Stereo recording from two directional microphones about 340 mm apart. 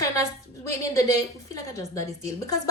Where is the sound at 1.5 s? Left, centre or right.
Centre.